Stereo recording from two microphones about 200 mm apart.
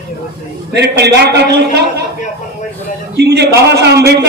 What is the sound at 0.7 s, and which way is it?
A man's voice, 55° right (ahead or behind).